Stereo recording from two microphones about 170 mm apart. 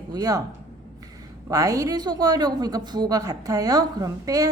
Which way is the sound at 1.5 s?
20° right (ahead or behind).